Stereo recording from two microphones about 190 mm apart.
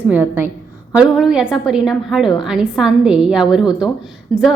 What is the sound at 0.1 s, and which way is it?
A woman's voice, 10° right (ahead or behind).